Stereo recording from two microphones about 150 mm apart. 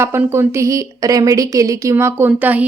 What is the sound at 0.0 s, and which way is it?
A woman's voice, 15° right (ahead or behind).